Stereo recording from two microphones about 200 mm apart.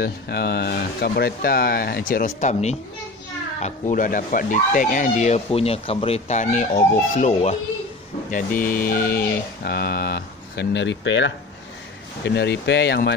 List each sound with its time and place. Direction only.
0.0 s speech: 50° left (ahead or behind)